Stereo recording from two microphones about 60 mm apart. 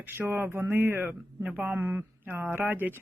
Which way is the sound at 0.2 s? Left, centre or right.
Right.